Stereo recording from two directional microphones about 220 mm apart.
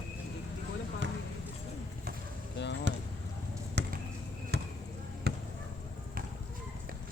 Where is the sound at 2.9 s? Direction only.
50° right (ahead or behind).